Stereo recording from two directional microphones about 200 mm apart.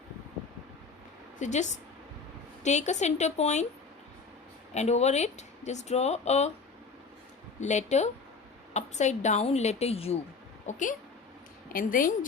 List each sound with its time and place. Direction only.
1.4 s speech: 35° left (ahead or behind)
4.7 s speech: 35° left (ahead or behind)
7.6 s a woman's voice: 35° left (ahead or behind)